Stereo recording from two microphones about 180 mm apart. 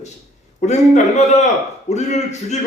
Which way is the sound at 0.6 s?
40° left (ahead or behind).